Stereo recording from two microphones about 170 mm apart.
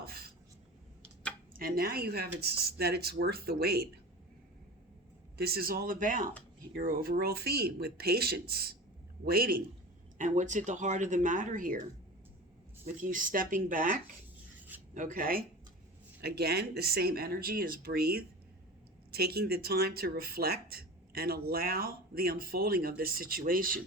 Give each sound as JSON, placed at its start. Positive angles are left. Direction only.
{"t": 0.0, "sound": "a sound", "side_deg": -65}
{"t": 1.5, "sound": "speech", "side_deg": -60}
{"t": 5.4, "sound": "speech", "side_deg": -65}
{"t": 10.2, "sound": "speech", "side_deg": -45}
{"t": 12.8, "sound": "speech", "side_deg": -50}
{"t": 16.2, "sound": "speech", "side_deg": -70}